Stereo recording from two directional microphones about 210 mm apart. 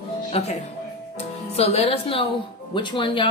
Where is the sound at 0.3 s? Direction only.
30° left (ahead or behind).